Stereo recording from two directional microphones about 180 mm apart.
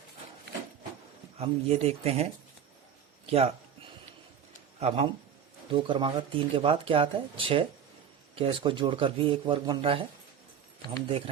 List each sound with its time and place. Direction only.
1.4 s speech: 35° right (ahead or behind)
3.2 s a sound: 35° right (ahead or behind)
4.8 s speech: 35° right (ahead or behind)